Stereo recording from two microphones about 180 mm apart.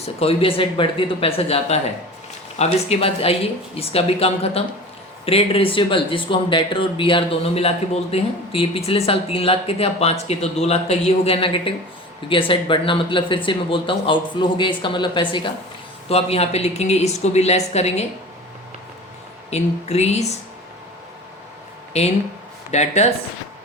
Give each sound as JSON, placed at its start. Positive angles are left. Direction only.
{"t": 0.0, "sound": "speech", "side_deg": 35}
{"t": 19.5, "sound": "speech", "side_deg": 35}
{"t": 22.7, "sound": "speech", "side_deg": 40}